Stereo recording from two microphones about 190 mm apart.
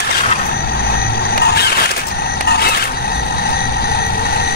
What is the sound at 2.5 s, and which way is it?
Printer, 55° left (ahead or behind).